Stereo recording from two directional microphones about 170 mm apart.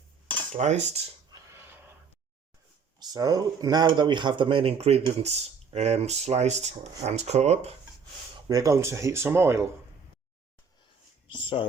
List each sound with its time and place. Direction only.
0.5 s speech: 40° right (ahead or behind)
1.3 s a sound: 15° right (ahead or behind)
3.0 s speech: 25° right (ahead or behind); by 7.7 s 40° right (ahead or behind)
8.4 s speech: 20° right (ahead or behind)
11.3 s speech: 30° left (ahead or behind)